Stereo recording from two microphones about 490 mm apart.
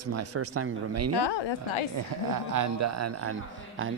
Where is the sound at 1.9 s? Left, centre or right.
Right.